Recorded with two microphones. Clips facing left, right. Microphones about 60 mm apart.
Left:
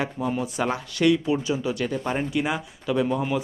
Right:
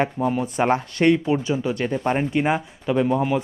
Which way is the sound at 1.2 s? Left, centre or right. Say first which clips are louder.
Right 2 dB; right.